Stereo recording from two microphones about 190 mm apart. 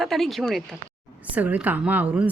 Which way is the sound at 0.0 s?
Centre (ahead or behind).